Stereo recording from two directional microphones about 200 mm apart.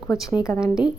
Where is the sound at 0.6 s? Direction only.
5° right (ahead or behind).